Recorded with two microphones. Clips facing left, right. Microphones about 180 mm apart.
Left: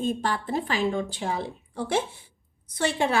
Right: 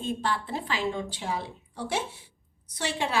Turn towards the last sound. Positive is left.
turn(degrees=55)  # may be behind; listen again after turning